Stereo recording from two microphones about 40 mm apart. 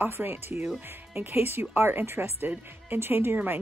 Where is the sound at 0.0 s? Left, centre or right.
Right.